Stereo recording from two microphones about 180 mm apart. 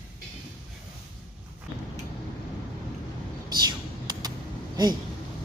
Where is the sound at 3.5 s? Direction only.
20° right (ahead or behind).